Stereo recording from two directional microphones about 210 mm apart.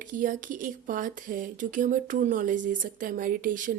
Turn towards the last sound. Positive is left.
turn(degrees=-40)  # may be behind; listen again after turning